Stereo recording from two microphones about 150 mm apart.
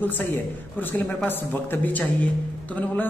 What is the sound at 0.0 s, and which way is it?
A man's voice, 10° left (ahead or behind).